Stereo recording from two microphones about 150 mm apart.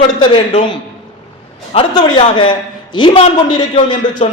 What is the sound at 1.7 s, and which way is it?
A man's voice, 35° left (ahead or behind).